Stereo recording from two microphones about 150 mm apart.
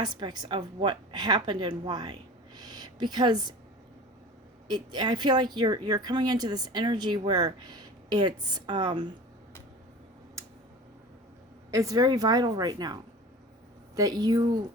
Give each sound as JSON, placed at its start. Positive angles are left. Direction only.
{"t": 0.0, "sound": "speech", "side_deg": -30}
{"t": 2.6, "sound": "a sound", "side_deg": -30}
{"t": 4.7, "sound": "speech", "side_deg": -30}
{"t": 11.7, "sound": "speech", "side_deg": -20}